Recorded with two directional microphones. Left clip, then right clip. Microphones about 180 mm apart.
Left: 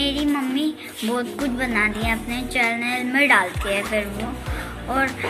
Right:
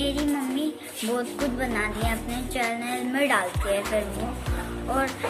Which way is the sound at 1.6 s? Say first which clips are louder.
Left 9 dB; 20° right (ahead or behind).